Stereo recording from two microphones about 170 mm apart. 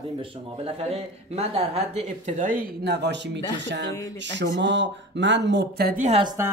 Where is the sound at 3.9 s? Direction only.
20° left (ahead or behind).